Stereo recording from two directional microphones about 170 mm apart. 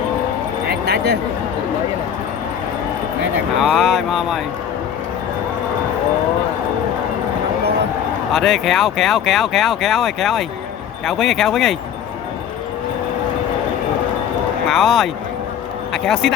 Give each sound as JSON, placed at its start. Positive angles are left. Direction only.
{"t": 0.7, "sound": "a sound", "side_deg": -70}
{"t": 3.6, "sound": "speech", "side_deg": 0}
{"t": 8.3, "sound": "speech", "side_deg": 0}
{"t": 14.7, "sound": "speech", "side_deg": 0}